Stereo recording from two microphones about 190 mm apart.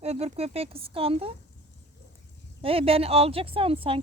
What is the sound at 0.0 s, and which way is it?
A woman's voice, 35° right (ahead or behind).